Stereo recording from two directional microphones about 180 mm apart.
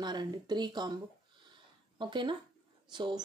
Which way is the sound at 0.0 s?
25° right (ahead or behind).